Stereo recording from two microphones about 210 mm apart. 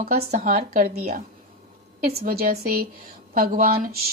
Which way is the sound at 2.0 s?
45° right (ahead or behind).